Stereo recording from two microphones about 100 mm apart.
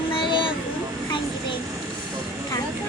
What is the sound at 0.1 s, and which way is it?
Vehicle, 55° left (ahead or behind).